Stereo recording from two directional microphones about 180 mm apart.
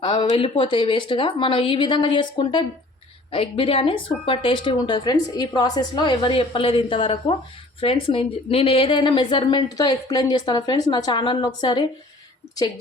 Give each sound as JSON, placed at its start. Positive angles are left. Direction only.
{"t": 0.0, "sound": "a woman's voice", "side_deg": 25}